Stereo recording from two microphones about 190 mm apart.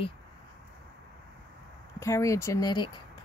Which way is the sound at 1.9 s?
15° left (ahead or behind).